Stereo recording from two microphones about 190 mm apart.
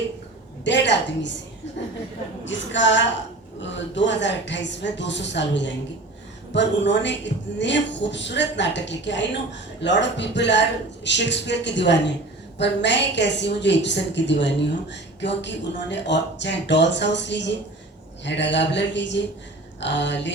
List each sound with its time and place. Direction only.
0.6 s a woman's voice: 65° left (ahead or behind)
2.4 s a woman's voice: 75° left (ahead or behind)